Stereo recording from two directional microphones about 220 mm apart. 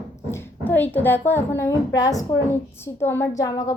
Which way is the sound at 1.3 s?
15° left (ahead or behind).